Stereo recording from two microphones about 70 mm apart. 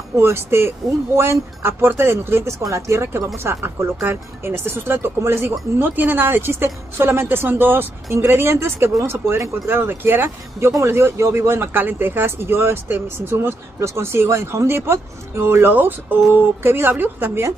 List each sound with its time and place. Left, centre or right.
0.2 s speech: right